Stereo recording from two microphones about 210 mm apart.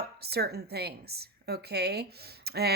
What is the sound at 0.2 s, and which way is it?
A woman's voice, 50° right (ahead or behind).